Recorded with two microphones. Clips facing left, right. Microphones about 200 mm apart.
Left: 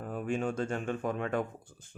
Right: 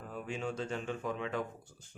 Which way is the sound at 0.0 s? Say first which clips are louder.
Left 6 dB; 50° left (ahead or behind).